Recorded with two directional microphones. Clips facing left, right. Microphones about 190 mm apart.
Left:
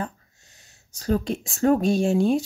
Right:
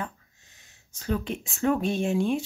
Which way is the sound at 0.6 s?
35° left (ahead or behind).